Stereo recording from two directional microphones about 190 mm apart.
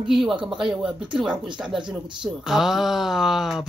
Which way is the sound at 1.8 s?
25° right (ahead or behind).